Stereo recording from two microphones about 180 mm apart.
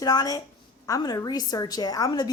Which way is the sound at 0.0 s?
20° left (ahead or behind).